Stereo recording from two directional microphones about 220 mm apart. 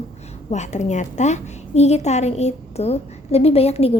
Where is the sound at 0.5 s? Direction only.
30° left (ahead or behind).